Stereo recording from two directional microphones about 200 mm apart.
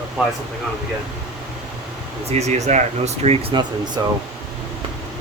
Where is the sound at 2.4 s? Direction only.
35° right (ahead or behind).